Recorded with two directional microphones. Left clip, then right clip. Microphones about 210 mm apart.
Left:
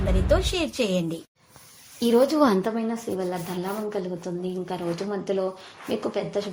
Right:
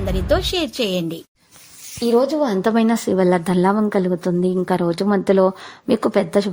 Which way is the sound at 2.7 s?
45° right (ahead or behind).